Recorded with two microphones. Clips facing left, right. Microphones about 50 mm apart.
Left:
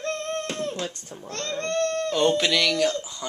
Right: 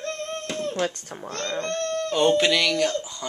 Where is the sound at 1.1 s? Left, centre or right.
Right.